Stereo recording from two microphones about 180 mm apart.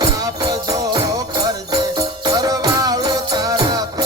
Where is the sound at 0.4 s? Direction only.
20° right (ahead or behind).